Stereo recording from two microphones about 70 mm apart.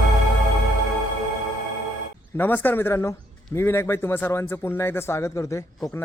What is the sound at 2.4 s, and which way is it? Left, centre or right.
A man's voice, left.